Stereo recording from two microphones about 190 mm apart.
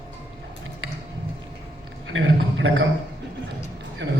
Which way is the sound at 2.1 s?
85° right.